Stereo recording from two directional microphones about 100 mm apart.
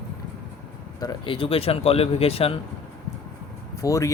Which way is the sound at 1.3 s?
65° left (ahead or behind).